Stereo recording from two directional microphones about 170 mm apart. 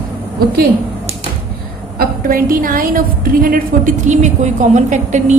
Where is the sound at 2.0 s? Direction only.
55° right (ahead or behind).